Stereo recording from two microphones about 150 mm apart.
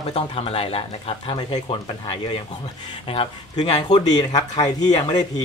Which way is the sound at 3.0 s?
40° left (ahead or behind).